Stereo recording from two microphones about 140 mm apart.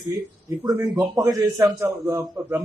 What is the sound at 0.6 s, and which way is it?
A man's voice, 25° right (ahead or behind).